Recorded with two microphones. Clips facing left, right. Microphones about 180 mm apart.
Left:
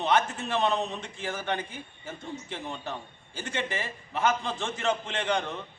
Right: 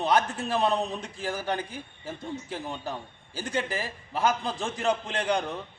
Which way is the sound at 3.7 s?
35° right (ahead or behind).